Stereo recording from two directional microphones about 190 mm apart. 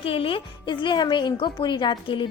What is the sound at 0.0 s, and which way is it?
Speech, 30° left (ahead or behind).